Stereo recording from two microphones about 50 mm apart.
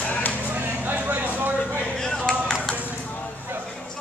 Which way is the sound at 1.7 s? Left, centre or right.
Right.